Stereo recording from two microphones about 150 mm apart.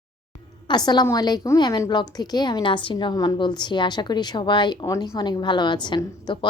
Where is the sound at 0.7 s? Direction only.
30° left (ahead or behind).